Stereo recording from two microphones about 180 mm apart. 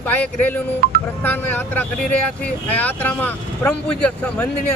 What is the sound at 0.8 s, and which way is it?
Speech, 55° right (ahead or behind).